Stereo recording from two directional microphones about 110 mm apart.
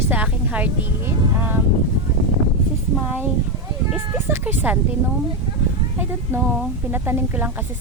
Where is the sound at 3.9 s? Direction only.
20° right (ahead or behind).